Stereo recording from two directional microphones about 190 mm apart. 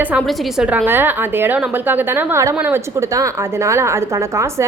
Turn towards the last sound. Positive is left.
turn(degrees=-15)  # may be behind; listen again after turning